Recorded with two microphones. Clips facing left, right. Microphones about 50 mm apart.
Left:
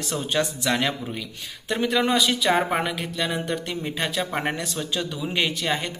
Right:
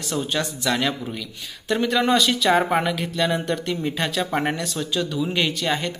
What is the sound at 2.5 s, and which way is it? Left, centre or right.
Speech, centre.